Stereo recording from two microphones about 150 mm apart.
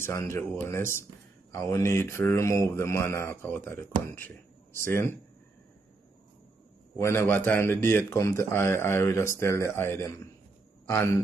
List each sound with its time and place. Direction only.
0.0 s a man's voice: 15° left (ahead or behind)
4.8 s a man's voice: 15° left (ahead or behind)
7.0 s a man's voice: 15° left (ahead or behind)